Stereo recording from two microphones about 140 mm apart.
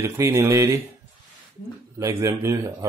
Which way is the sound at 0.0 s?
20° right (ahead or behind).